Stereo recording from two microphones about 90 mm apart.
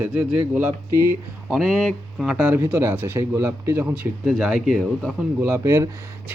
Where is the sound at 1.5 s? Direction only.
5° left (ahead or behind).